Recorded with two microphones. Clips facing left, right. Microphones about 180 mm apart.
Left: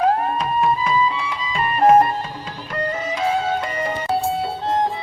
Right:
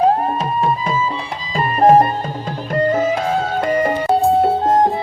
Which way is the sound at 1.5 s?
35° right (ahead or behind).